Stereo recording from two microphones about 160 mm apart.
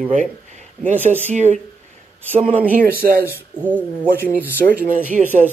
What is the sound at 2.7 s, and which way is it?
Speech, 65° right (ahead or behind).